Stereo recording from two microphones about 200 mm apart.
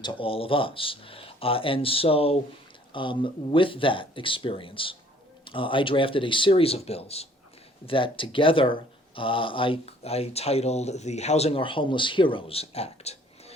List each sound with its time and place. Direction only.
0.0 s speech: 25° left (ahead or behind)